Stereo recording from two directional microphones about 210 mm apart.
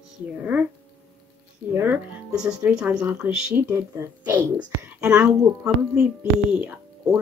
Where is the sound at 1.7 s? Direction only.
10° right (ahead or behind).